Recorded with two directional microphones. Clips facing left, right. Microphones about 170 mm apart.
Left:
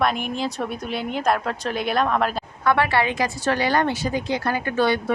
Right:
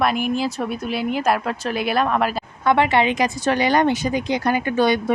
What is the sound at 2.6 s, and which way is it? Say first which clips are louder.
A woman's voice: right 3 dB; 20° right (ahead or behind).